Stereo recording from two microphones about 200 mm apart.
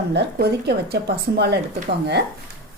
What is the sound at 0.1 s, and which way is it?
A woman's voice, 55° right (ahead or behind).